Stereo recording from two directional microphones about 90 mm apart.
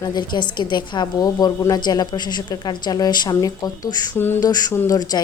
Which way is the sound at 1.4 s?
45° left (ahead or behind).